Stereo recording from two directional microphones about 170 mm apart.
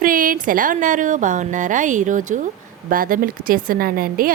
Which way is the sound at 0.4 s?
50° right (ahead or behind).